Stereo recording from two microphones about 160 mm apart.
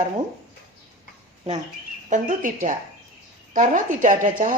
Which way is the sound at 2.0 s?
55° right (ahead or behind).